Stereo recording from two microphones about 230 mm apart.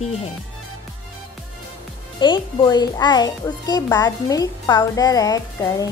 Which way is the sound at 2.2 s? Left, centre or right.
Centre.